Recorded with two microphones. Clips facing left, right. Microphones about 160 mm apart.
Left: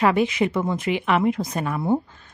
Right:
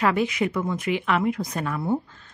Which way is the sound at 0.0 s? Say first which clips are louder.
Left 3 dB; 20° left (ahead or behind).